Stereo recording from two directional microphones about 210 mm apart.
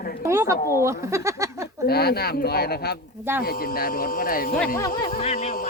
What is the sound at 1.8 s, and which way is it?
Speech, 50° left (ahead or behind).